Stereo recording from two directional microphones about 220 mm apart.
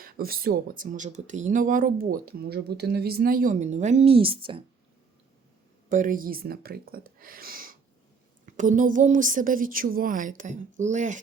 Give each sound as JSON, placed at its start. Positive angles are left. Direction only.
{"t": 0.0, "sound": "speech", "side_deg": -40}
{"t": 5.9, "sound": "speech", "side_deg": -35}